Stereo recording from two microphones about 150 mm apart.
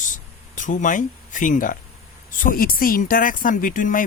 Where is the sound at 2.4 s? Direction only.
70° left (ahead or behind).